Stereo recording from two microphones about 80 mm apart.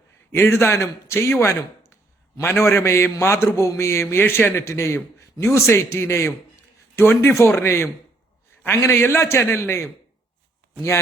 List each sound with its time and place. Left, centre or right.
0.3 s a man's voice: left